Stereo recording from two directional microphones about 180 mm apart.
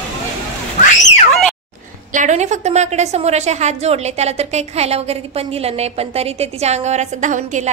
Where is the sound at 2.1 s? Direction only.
45° right (ahead or behind).